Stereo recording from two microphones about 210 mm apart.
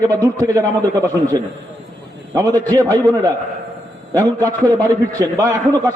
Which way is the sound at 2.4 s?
15° right (ahead or behind).